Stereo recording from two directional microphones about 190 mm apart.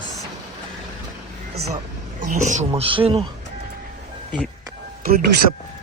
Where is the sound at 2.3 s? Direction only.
40° right (ahead or behind).